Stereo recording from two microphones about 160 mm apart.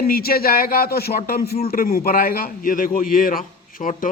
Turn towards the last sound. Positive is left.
turn(degrees=55)  # may be behind; listen again after turning